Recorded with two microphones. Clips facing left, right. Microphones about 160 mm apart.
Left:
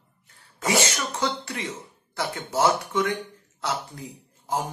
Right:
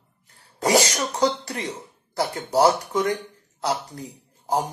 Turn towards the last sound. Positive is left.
turn(degrees=-40)  # may be behind; listen again after turning